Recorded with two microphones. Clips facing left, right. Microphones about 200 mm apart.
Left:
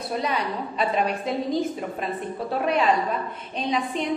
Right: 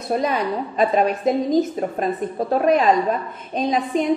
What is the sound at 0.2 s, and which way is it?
A woman's voice, 45° right (ahead or behind).